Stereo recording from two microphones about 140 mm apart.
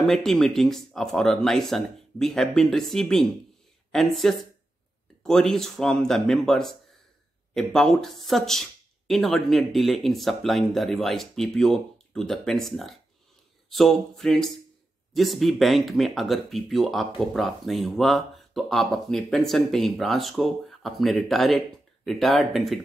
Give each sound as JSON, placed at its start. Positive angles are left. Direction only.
{"t": 0.0, "sound": "speech", "side_deg": 5}